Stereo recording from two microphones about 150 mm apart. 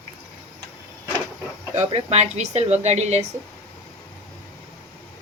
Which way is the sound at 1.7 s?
45° right (ahead or behind).